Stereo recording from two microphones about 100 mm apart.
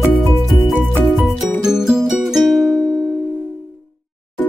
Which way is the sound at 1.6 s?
5° right (ahead or behind).